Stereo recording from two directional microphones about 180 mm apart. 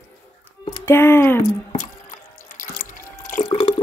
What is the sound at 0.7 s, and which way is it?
Speech, 15° left (ahead or behind).